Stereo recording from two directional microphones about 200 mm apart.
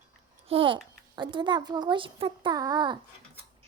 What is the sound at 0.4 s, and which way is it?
A child's voice, 25° right (ahead or behind).